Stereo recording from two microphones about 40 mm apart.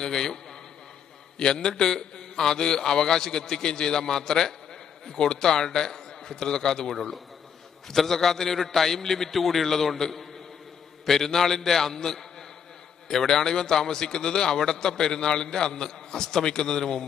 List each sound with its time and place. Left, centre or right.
0.0 s a man's voice: centre
1.4 s a man's voice: centre